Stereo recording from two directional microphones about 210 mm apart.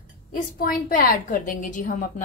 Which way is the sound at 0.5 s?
45° left (ahead or behind).